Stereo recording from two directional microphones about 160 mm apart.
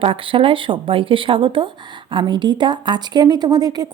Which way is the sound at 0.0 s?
35° right (ahead or behind).